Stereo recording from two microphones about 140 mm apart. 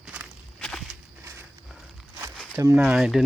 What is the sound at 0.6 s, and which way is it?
Walk, 5° left (ahead or behind).